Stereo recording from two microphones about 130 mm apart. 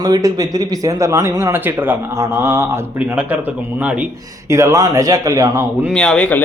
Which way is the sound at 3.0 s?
10° right (ahead or behind).